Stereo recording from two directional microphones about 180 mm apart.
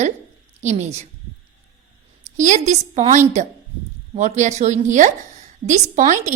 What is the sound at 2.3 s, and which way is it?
A woman's voice, 40° right (ahead or behind).